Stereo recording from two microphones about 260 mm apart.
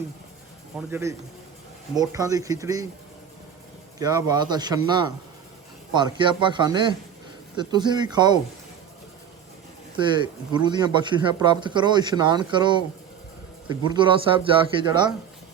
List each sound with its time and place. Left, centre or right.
0.9 s a man's voice: centre
3.9 s a man's voice: centre
5.9 s a man's voice: centre
10.0 s a man's voice: centre